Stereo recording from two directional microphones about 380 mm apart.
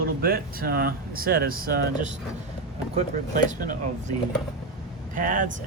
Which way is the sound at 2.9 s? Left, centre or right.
Centre.